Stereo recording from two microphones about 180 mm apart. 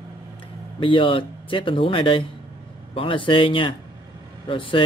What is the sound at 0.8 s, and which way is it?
Speech, 30° left (ahead or behind).